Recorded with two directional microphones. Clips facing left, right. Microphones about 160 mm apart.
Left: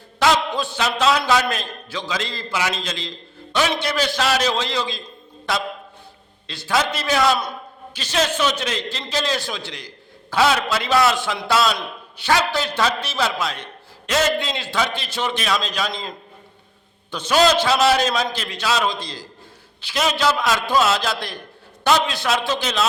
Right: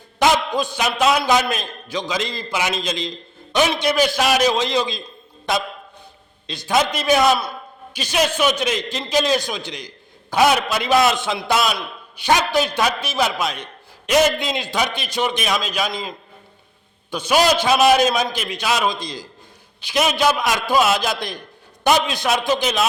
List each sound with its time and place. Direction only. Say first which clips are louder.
0.2 s a man's voice: right 1 dB; 15° right (ahead or behind)
17.1 s a man's voice: even; 10° right (ahead or behind)